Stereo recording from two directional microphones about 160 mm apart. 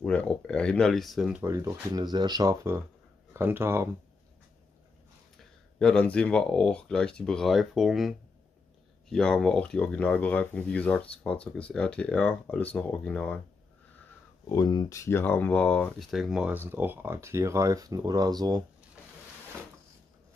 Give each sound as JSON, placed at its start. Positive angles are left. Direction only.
{"t": 0.0, "sound": "speech", "side_deg": 5}
{"t": 1.4, "sound": "speech", "side_deg": -20}
{"t": 5.8, "sound": "speech", "side_deg": 5}
{"t": 9.1, "sound": "speech", "side_deg": 5}
{"t": 14.5, "sound": "speech", "side_deg": 25}